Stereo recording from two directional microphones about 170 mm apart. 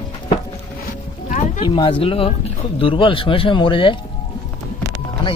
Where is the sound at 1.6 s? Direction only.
25° left (ahead or behind).